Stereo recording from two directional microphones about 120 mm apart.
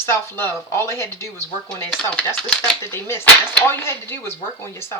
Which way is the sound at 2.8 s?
20° left (ahead or behind).